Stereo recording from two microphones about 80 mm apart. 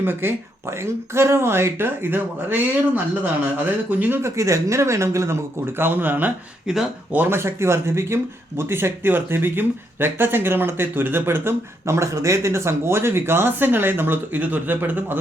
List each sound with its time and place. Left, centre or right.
0.0 s speech: right
4.2 s speech: right
6.7 s speech: centre
7.1 s speech: right